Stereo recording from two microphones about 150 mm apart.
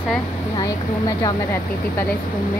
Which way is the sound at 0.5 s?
25° left (ahead or behind).